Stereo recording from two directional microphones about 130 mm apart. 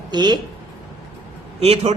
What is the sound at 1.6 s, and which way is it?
Speech, 50° right (ahead or behind).